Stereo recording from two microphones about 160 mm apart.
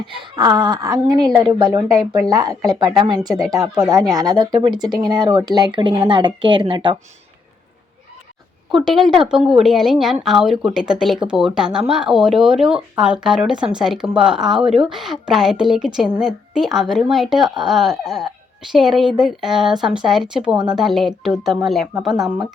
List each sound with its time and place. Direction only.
0.0 s a woman's voice: 30° right (ahead or behind)
8.7 s a woman's voice: centre (ahead or behind)